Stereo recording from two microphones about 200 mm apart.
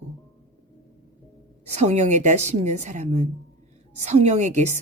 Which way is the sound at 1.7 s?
35° right (ahead or behind).